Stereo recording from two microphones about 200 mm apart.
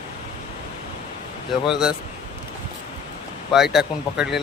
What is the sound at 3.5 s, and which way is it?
Speech, centre (ahead or behind).